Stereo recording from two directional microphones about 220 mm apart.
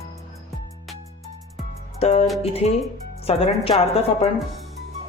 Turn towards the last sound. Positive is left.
turn(degrees=25)  # may be behind; listen again after turning